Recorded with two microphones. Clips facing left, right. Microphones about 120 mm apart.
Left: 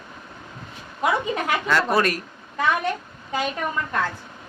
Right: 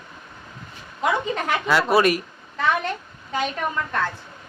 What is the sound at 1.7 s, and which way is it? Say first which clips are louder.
Speech: right 4 dB; 5° right (ahead or behind).